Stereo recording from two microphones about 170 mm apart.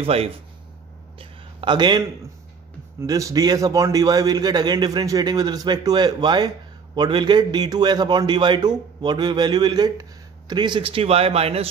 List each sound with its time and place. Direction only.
0.0 s speech: 35° right (ahead or behind)
1.1 s a sound: 30° right (ahead or behind)
3.0 s a man's voice: 20° right (ahead or behind); by 11.7 s 35° right (ahead or behind)